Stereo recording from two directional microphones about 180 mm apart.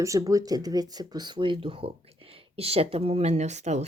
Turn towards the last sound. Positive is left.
turn(degrees=-40)  # may be behind; listen again after turning